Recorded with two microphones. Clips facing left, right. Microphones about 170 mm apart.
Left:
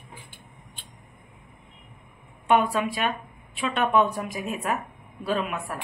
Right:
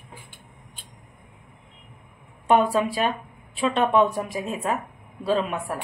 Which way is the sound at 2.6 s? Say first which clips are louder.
Right 3 dB; 30° right (ahead or behind).